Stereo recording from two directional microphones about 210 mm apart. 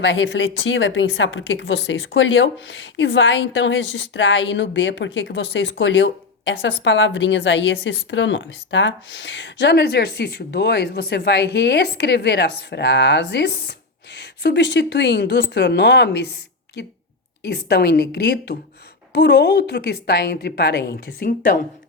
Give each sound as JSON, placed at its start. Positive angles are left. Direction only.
{"t": 0.0, "sound": "a woman's voice", "side_deg": 60}